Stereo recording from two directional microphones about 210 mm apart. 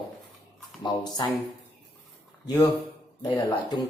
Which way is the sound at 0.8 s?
20° left (ahead or behind).